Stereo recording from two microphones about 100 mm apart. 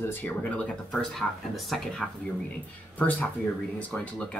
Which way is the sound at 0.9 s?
Centre (ahead or behind).